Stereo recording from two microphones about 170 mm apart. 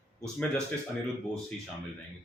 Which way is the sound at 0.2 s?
5° left (ahead or behind).